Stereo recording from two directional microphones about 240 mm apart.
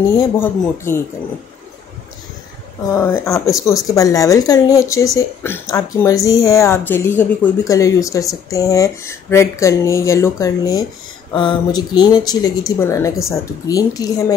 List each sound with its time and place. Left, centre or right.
0.4 s a woman's voice: centre
2.9 s a woman's voice: centre